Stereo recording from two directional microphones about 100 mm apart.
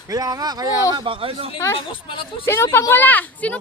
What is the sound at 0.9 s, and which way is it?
Speech, 60° right (ahead or behind).